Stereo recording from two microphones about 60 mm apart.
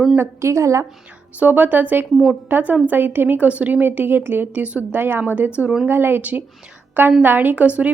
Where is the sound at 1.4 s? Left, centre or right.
Right.